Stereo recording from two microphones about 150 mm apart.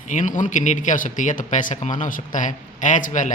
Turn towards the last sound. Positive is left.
turn(degrees=60)  # may be behind; listen again after turning